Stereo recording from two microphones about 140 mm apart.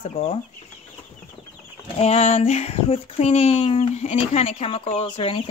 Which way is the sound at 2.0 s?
50° left (ahead or behind).